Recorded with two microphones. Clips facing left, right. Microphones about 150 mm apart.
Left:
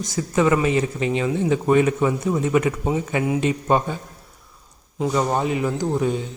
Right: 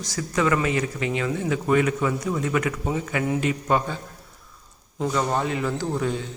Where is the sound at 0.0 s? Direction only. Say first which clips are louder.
Left 4 dB; 20° left (ahead or behind).